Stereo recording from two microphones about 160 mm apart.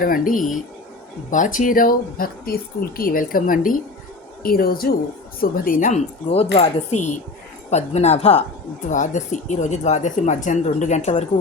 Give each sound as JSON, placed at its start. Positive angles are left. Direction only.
{"t": 0.0, "sound": "speech", "side_deg": 60}
{"t": 6.6, "sound": "speech", "side_deg": 45}
{"t": 8.9, "sound": "speech", "side_deg": 50}